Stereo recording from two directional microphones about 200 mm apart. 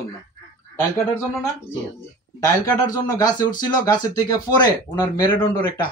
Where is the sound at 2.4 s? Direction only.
15° left (ahead or behind).